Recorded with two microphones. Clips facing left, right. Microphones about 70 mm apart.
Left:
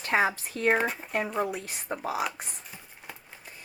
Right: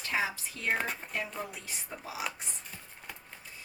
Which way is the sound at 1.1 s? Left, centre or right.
Left.